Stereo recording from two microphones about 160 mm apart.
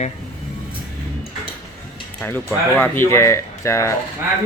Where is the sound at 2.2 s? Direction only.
10° left (ahead or behind).